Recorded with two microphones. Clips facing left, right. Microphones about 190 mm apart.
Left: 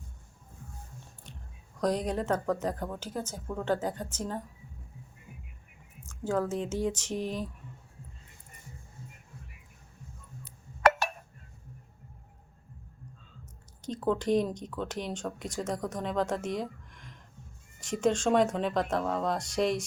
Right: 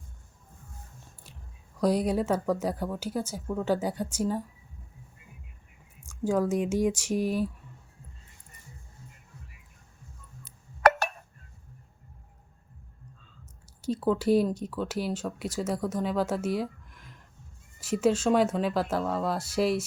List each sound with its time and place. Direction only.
1.8 s speech: 10° right (ahead or behind)
6.0 s speech: 10° right (ahead or behind)
13.8 s speech: 5° right (ahead or behind)